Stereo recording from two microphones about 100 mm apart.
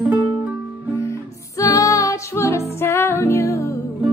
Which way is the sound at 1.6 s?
35° left (ahead or behind).